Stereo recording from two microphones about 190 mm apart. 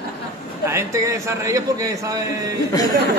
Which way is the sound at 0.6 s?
15° right (ahead or behind).